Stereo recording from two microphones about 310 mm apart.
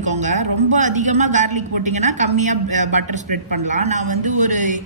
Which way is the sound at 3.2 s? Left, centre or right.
Right.